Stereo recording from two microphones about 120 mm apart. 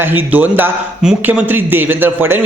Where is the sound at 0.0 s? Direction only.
15° right (ahead or behind).